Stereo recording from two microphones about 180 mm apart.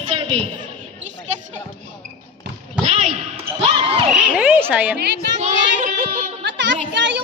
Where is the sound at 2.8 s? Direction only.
35° right (ahead or behind).